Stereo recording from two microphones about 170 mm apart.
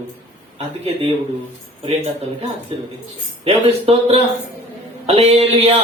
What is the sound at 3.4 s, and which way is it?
Speech, 35° right (ahead or behind).